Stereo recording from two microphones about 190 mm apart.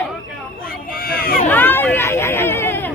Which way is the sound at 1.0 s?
50° left (ahead or behind).